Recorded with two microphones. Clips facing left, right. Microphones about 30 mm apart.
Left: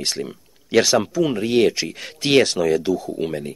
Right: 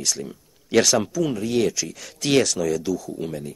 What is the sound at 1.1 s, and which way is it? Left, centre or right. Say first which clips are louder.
Speech: left 4 dB; left.